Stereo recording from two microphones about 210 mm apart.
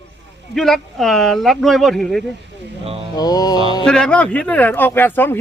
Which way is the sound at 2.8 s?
30° right (ahead or behind).